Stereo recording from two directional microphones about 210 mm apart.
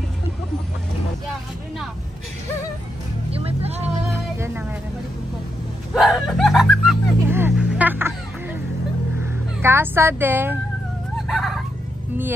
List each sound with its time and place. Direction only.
3.3 s music: 30° right (ahead or behind)
5.9 s music: centre (ahead or behind)
9.2 s vehicle: 10° right (ahead or behind)
11.2 s a sound: centre (ahead or behind)